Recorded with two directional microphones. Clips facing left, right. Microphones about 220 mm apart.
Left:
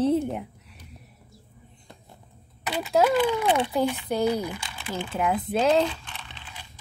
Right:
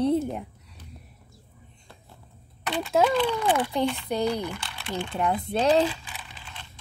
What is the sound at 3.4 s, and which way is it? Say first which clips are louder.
Speech: left 1 dB; 20° left (ahead or behind).